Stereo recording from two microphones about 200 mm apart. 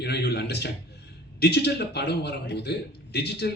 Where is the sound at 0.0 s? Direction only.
55° left (ahead or behind).